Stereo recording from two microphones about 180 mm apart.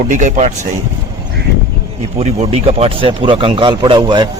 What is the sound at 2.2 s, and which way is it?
Speech, 35° right (ahead or behind).